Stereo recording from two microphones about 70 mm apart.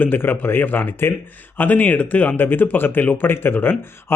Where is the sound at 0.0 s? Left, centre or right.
Left.